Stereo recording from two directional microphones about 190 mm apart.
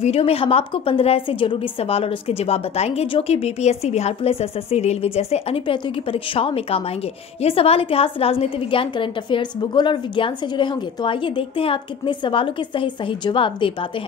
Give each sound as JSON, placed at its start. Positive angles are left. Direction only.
{"t": 0.0, "sound": "a woman's voice", "side_deg": 30}